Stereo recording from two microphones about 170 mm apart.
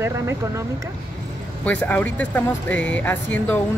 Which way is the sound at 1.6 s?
10° left (ahead or behind).